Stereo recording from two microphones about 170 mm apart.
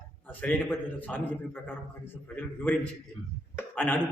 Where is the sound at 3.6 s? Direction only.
10° left (ahead or behind).